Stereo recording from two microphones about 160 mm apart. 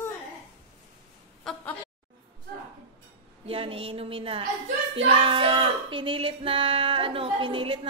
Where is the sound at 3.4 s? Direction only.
35° right (ahead or behind).